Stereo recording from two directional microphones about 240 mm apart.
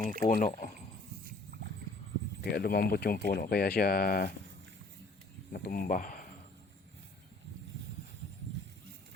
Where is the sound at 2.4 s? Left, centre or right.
Left.